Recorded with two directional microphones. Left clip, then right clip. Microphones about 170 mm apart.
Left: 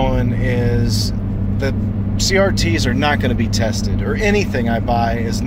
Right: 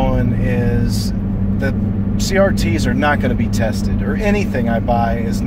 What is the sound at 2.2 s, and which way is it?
Speech, 15° left (ahead or behind).